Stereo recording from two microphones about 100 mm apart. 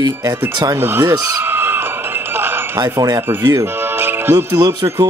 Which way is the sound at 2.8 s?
40° right (ahead or behind).